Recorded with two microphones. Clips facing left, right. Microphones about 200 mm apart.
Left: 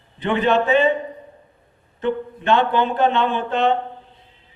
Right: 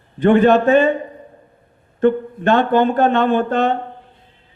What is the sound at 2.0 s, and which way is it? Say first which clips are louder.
A man's voice: right 7 dB; 50° right (ahead or behind).